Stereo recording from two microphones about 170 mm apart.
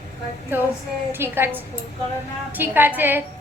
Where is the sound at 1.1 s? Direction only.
10° right (ahead or behind).